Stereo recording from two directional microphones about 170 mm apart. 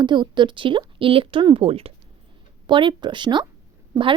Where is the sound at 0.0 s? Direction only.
25° right (ahead or behind).